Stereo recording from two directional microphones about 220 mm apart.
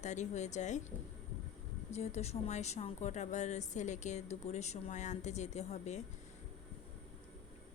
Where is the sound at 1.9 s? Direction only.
30° left (ahead or behind).